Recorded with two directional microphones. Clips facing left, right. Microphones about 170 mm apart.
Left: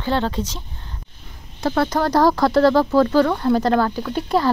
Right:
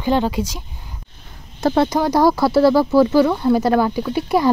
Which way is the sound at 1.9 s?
10° right (ahead or behind).